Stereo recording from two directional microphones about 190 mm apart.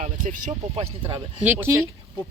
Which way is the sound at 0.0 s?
40° right (ahead or behind).